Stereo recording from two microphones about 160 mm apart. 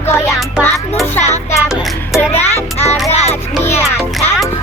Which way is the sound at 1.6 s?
Centre (ahead or behind).